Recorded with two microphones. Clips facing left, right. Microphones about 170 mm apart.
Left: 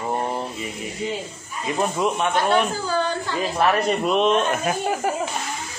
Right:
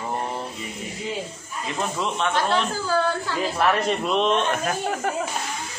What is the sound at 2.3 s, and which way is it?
A woman's voice, centre (ahead or behind).